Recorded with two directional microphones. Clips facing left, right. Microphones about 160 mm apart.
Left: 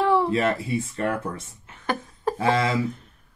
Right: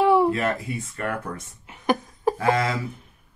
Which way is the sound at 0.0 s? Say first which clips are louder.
Right 3 dB; 15° right (ahead or behind).